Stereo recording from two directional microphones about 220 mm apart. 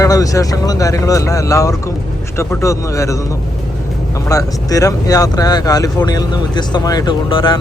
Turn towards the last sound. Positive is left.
turn(degrees=20)  # may be behind; listen again after turning